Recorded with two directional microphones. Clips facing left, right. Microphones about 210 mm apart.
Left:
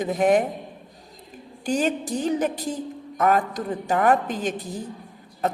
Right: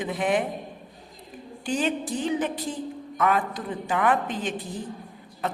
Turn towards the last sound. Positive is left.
turn(degrees=40)  # may be behind; listen again after turning